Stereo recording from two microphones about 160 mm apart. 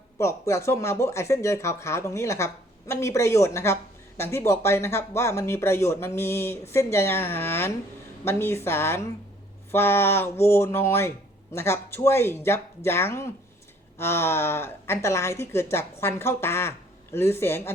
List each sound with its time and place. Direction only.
0.2 s speech: 20° left (ahead or behind)